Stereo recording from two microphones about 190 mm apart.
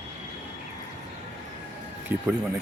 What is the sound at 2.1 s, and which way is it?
Speech, 10° right (ahead or behind).